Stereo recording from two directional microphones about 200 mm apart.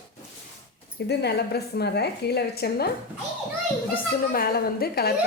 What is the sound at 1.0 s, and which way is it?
A woman's voice, 55° left (ahead or behind).